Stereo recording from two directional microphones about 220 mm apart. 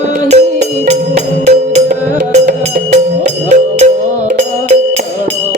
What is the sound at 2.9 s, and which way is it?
Music, 35° right (ahead or behind).